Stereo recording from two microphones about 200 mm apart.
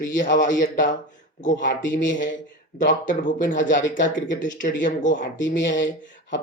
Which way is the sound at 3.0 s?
40° left (ahead or behind).